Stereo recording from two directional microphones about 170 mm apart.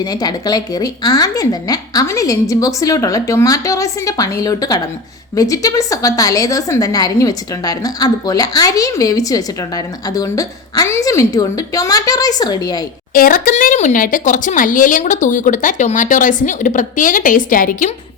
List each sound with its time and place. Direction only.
0.0 s a woman's voice: 25° left (ahead or behind)
13.1 s speech: 55° left (ahead or behind)